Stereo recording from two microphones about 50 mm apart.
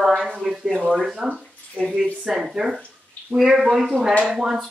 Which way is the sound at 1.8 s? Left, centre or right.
Left.